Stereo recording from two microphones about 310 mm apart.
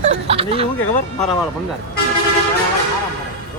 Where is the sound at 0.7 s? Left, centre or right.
Centre.